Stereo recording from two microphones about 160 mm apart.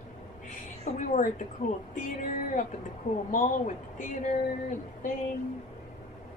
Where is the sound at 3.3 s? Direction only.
55° left (ahead or behind).